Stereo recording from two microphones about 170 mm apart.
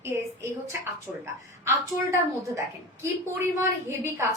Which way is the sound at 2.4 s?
20° right (ahead or behind).